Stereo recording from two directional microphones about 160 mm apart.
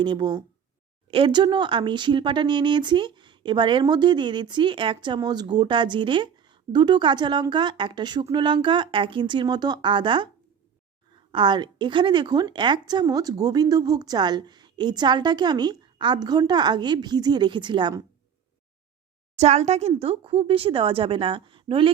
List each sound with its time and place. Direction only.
0.0 s speech: 30° right (ahead or behind)
19.4 s a woman's voice: 45° right (ahead or behind)